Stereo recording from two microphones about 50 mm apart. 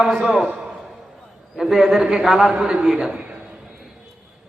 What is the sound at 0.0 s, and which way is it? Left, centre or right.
Speech, centre.